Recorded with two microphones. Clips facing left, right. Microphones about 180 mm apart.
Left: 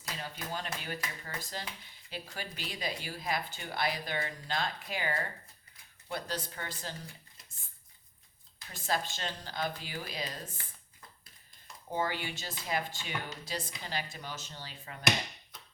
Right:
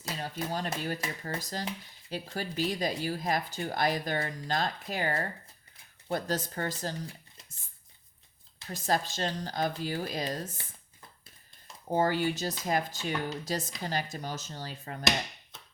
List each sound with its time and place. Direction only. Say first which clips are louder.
0.0 s speech: right 6 dB; 35° right (ahead or behind)
8.7 s speech: right 4 dB; 40° right (ahead or behind)
11.9 s speech: right 7 dB; 45° right (ahead or behind)